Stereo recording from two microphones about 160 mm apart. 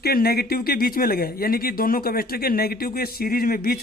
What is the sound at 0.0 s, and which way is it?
Speech, 70° left (ahead or behind).